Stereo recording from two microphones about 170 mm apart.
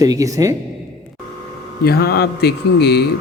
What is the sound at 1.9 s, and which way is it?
Speech, 70° left (ahead or behind).